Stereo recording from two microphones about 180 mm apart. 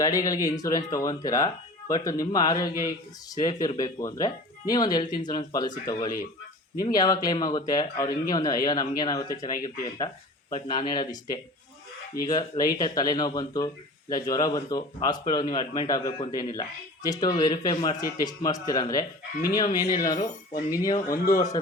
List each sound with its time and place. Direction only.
0.0 s speech: 20° left (ahead or behind)